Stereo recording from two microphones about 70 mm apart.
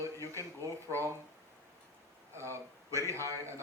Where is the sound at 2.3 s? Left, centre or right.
Right.